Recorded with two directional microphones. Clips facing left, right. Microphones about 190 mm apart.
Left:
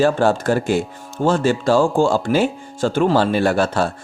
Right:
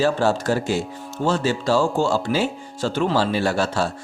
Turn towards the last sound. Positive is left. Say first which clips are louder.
# left 4 dB
turn(degrees=55)  # may be behind; listen again after turning